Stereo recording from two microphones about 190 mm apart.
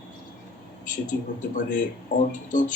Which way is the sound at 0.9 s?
40° left (ahead or behind).